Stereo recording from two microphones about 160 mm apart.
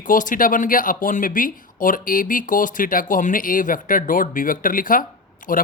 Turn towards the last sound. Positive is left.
turn(degrees=60)  # may be behind; listen again after turning